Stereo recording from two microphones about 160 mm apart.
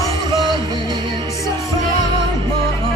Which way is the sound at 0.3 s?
25° right (ahead or behind).